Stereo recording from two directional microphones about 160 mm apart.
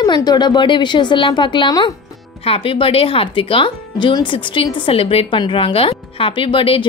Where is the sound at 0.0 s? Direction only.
25° left (ahead or behind).